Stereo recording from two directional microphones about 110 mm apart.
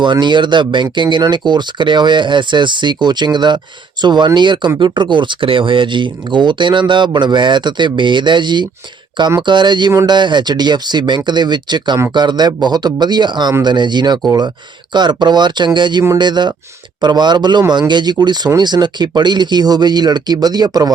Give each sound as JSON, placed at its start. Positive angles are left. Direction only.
{"t": 0.0, "sound": "speech", "side_deg": -45}